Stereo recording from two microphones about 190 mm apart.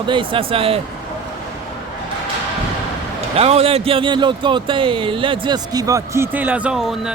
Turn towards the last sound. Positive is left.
turn(degrees=-5)  # may be behind; listen again after turning